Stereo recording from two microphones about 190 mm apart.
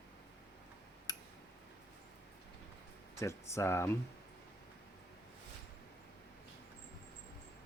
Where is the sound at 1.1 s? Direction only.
20° left (ahead or behind).